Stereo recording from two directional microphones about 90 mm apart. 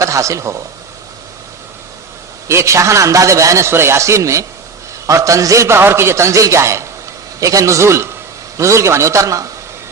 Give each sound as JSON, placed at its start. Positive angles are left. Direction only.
{"t": 0.0, "sound": "a man's voice", "side_deg": -35}
{"t": 2.5, "sound": "a man's voice", "side_deg": -30}